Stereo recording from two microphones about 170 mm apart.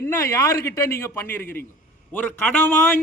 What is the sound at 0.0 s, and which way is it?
A man's voice, 15° left (ahead or behind).